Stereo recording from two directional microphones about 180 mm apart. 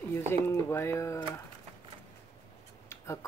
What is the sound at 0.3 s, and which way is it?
Speech, 15° left (ahead or behind).